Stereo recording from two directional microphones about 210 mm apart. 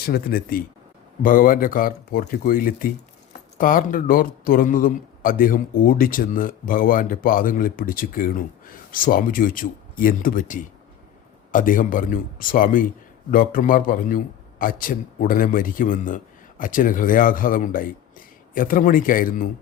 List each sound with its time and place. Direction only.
0.0 s speech: 45° left (ahead or behind)